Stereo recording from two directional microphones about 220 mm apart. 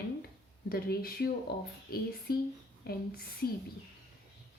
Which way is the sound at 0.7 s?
45° left (ahead or behind).